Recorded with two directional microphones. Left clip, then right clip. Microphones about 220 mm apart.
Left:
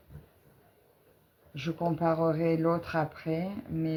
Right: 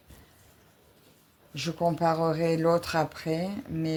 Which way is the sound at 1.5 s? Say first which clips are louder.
Right 4 dB; 35° right (ahead or behind).